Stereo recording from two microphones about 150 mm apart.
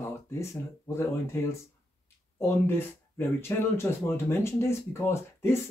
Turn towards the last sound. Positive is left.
turn(degrees=15)  # may be behind; listen again after turning